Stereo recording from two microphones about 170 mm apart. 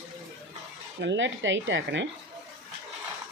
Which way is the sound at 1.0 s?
90° right.